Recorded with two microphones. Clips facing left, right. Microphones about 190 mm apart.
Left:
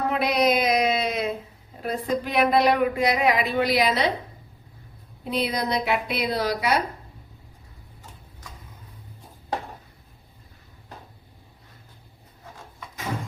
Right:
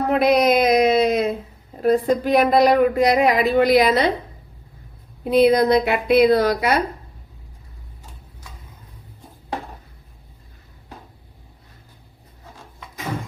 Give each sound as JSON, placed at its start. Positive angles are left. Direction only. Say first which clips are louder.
{"t": 0.1, "sound": "a sound", "louder": "right 7 dB", "side_deg": -50}
{"t": 1.8, "sound": "speech", "louder": "right 9 dB", "side_deg": -40}
{"t": 5.3, "sound": "speech", "louder": "right 11 dB", "side_deg": -55}